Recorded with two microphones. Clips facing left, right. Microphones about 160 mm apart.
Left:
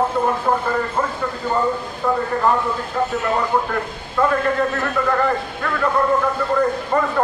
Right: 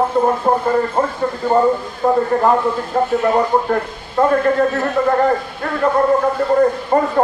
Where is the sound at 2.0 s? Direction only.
40° right (ahead or behind).